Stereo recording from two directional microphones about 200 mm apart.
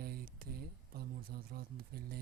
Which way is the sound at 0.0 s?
50° right (ahead or behind).